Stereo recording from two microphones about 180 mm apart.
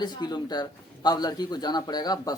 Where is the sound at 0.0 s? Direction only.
25° left (ahead or behind).